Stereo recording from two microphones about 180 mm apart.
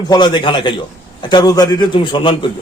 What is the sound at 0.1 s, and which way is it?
A man's voice, 25° left (ahead or behind).